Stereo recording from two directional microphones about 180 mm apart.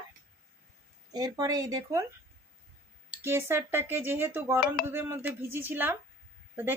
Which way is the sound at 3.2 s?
15° right (ahead or behind).